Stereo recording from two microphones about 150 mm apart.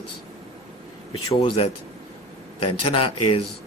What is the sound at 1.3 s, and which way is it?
Speech, 35° left (ahead or behind).